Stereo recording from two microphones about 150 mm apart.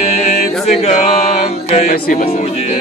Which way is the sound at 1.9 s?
65° left (ahead or behind).